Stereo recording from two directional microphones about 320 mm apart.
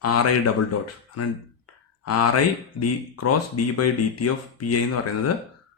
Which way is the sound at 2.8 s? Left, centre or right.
Left.